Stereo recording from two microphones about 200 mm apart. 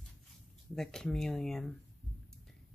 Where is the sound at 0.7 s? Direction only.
5° left (ahead or behind).